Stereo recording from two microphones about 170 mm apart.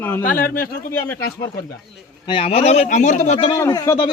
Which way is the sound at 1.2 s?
65° left (ahead or behind).